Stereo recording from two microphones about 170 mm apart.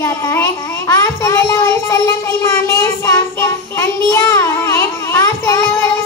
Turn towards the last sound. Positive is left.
turn(degrees=15)  # may be behind; listen again after turning